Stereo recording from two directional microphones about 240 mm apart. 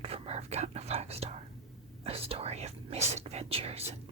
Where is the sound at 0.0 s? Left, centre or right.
Right.